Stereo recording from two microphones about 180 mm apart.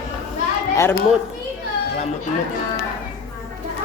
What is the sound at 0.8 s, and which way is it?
Speech, 15° left (ahead or behind).